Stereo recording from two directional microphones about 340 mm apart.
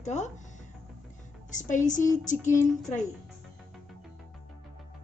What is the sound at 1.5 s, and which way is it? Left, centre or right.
A woman's voice, left.